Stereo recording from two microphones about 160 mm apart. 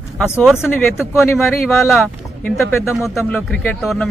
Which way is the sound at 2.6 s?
15° left (ahead or behind).